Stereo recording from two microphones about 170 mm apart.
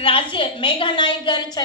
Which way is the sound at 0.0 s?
30° left (ahead or behind).